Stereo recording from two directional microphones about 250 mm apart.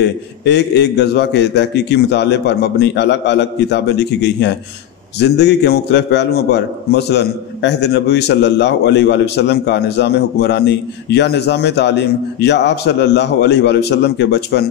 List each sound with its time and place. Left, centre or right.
0.5 s a man's voice: left